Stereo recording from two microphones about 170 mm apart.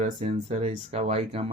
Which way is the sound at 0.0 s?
45° right (ahead or behind).